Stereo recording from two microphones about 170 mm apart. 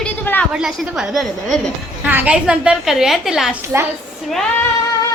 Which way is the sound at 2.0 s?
10° right (ahead or behind).